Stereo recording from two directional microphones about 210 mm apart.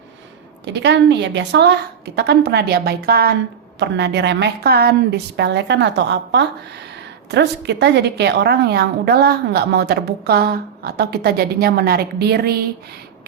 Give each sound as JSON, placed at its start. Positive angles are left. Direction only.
{"t": 0.6, "sound": "a woman's voice", "side_deg": -55}